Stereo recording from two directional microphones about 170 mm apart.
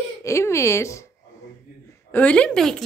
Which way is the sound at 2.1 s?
10° left (ahead or behind).